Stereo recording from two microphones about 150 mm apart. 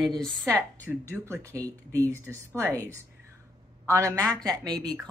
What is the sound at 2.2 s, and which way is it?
Speech, 20° right (ahead or behind).